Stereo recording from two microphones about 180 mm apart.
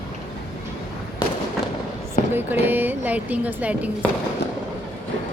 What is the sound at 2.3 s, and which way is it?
Speech, 10° right (ahead or behind).